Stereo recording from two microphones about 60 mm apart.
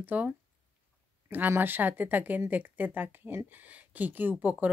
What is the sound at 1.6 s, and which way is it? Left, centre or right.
Speech, right.